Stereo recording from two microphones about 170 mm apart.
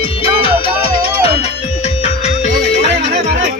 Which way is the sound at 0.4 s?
35° left (ahead or behind).